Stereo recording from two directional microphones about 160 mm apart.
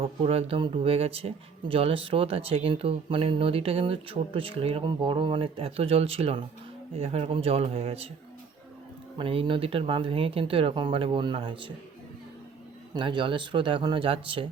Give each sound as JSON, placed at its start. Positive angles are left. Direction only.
{"t": 0.0, "sound": "speech", "side_deg": -35}
{"t": 9.1, "sound": "speech", "side_deg": -35}
{"t": 12.9, "sound": "speech", "side_deg": -30}